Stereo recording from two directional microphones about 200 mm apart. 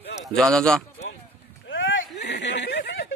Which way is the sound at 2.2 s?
60° left (ahead or behind).